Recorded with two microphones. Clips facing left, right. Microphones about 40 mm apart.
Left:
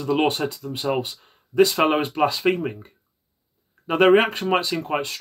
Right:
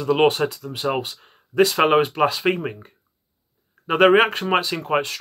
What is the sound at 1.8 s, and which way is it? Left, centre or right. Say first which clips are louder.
Speech: right 3 dB; right.